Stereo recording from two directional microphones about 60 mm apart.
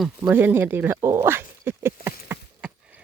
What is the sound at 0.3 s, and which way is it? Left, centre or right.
Speech, right.